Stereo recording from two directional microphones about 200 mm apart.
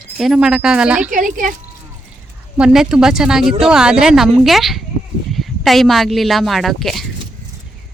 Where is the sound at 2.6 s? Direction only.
5° right (ahead or behind).